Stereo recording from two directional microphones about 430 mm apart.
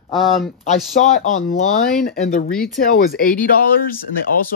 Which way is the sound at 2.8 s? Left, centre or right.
Centre.